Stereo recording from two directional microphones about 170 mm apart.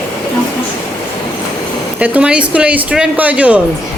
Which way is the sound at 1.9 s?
10° right (ahead or behind).